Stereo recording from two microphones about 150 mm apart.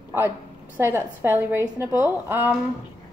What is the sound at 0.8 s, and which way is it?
Speech, 15° right (ahead or behind).